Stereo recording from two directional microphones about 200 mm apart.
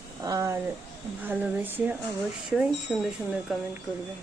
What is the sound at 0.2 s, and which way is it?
Speech, 15° right (ahead or behind).